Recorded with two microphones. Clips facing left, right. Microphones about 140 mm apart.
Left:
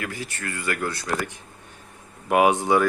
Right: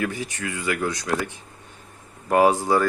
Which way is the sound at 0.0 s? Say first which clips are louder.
Right 4 dB; 15° right (ahead or behind).